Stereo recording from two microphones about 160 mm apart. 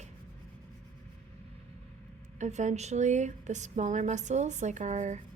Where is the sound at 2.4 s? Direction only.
45° right (ahead or behind).